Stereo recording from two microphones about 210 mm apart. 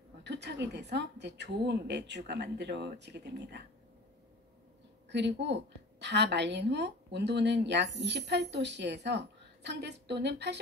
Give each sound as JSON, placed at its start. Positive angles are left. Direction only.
{"t": 0.2, "sound": "a woman's voice", "side_deg": -55}
{"t": 5.1, "sound": "a woman's voice", "side_deg": -55}